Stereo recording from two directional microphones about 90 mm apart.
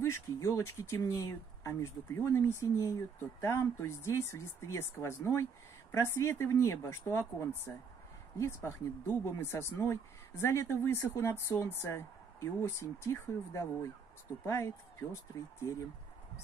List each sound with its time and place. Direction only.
0.0 s speech: 30° left (ahead or behind)